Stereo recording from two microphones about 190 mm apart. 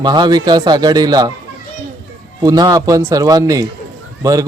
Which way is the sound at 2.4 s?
20° right (ahead or behind).